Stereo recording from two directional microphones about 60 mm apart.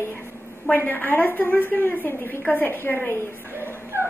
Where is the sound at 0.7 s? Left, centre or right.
Left.